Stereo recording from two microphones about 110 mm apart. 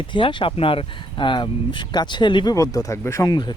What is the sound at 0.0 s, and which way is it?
Speech, 50° left (ahead or behind).